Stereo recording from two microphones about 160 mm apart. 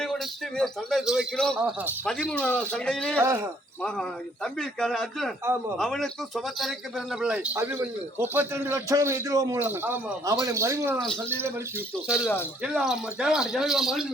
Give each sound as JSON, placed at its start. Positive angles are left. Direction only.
{"t": 0.0, "sound": "a man's voice", "side_deg": 5}
{"t": 3.2, "sound": "speech", "side_deg": -15}
{"t": 4.4, "sound": "a man's voice", "side_deg": 5}
{"t": 12.0, "sound": "a man's voice", "side_deg": -5}